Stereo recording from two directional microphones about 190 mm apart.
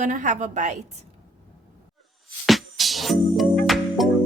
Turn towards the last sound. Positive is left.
turn(degrees=0)  # may be behind; listen again after turning